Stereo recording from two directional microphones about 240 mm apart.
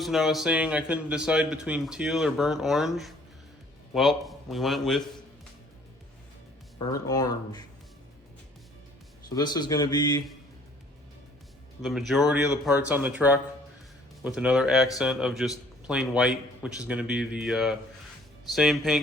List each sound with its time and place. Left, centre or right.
0.0 s a man's voice: centre
6.7 s speech: centre
9.3 s speech: centre
11.8 s a man's voice: centre